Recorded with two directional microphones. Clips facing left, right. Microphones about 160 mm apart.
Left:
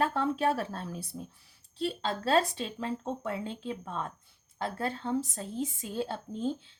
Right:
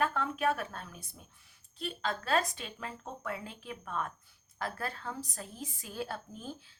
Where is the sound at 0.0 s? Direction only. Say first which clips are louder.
Left 3 dB; 30° left (ahead or behind).